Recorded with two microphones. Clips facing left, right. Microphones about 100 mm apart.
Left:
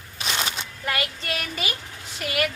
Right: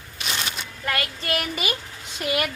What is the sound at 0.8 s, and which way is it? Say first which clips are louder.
Child singing: right 1 dB; 10° left (ahead or behind).